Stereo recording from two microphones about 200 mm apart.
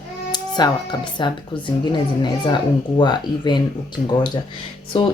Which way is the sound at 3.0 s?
20° left (ahead or behind).